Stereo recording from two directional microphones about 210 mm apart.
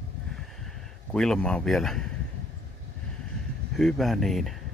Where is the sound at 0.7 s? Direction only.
5° left (ahead or behind).